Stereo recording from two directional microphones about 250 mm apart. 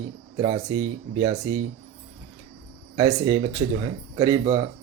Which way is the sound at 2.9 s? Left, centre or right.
Centre.